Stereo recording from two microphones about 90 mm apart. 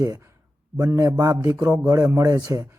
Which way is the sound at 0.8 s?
40° right (ahead or behind).